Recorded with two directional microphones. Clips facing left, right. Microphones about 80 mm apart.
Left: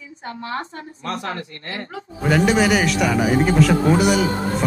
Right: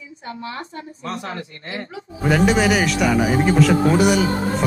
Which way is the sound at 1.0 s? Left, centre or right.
Left.